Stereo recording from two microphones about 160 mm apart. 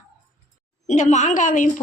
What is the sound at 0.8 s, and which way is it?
Speech, 50° left (ahead or behind).